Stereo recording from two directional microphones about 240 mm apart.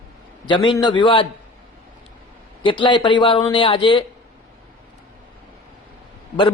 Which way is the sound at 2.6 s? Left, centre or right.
Centre.